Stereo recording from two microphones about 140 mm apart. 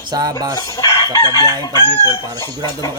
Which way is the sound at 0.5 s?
30° left (ahead or behind).